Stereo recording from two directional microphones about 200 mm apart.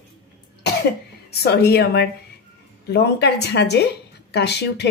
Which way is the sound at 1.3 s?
55° left (ahead or behind).